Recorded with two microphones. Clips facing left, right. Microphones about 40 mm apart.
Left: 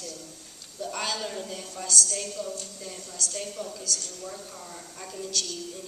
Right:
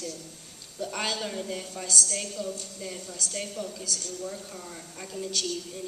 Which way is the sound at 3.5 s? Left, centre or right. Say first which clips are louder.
Even; centre.